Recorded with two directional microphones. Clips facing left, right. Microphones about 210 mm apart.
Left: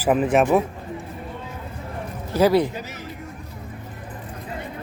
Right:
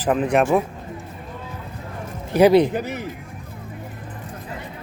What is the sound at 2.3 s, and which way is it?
Speech, 20° right (ahead or behind).